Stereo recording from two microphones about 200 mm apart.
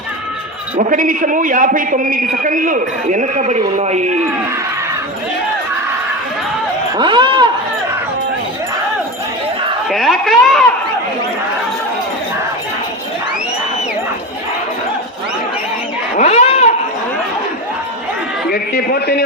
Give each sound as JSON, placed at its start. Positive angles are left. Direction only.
{"t": 0.8, "sound": "a man's voice", "side_deg": -40}
{"t": 6.9, "sound": "speech", "side_deg": -25}
{"t": 9.9, "sound": "speech", "side_deg": 0}
{"t": 16.1, "sound": "a sound", "side_deg": 35}
{"t": 18.5, "sound": "a man's voice", "side_deg": 50}